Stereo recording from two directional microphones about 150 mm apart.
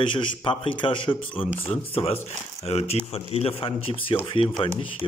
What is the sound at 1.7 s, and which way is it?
A man's voice, 45° left (ahead or behind).